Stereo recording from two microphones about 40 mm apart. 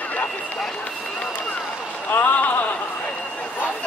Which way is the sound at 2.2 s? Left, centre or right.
Left.